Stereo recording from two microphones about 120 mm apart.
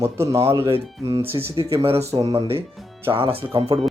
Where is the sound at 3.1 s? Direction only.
50° right (ahead or behind).